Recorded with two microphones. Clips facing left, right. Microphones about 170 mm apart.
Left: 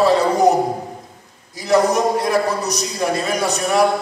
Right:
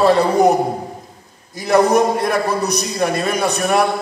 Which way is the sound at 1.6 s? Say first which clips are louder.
Right 2 dB; 60° right (ahead or behind).